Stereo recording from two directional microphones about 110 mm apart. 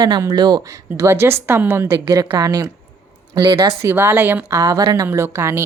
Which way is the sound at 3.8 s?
25° right (ahead or behind).